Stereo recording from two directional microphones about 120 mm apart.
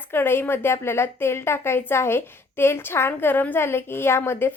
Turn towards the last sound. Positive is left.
turn(degrees=20)  # may be behind; listen again after turning